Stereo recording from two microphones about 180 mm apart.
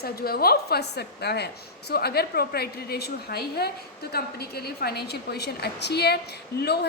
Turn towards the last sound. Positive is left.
turn(degrees=65)  # may be behind; listen again after turning